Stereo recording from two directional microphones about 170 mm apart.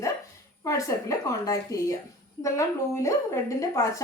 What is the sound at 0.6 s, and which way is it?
A woman's voice, 20° left (ahead or behind).